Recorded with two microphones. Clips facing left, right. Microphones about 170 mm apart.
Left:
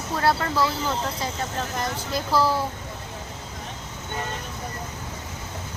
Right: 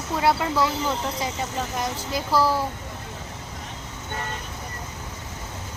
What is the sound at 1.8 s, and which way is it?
Speech, 10° right (ahead or behind).